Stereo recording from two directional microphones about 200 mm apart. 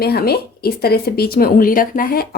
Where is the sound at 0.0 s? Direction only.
50° left (ahead or behind).